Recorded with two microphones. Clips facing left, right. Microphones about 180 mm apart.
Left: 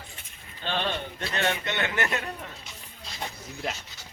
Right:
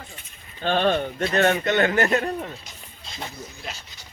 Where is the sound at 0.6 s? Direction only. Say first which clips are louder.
Right 9 dB; 50° right (ahead or behind).